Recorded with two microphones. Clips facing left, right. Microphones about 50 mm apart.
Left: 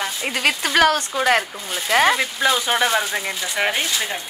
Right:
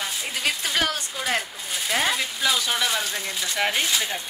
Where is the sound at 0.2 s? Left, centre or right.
Left.